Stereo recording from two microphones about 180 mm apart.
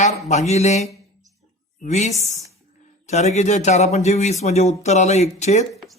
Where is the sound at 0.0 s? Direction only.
40° left (ahead or behind).